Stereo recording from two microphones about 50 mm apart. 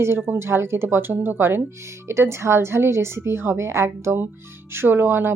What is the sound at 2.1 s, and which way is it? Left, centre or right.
A woman's voice, right.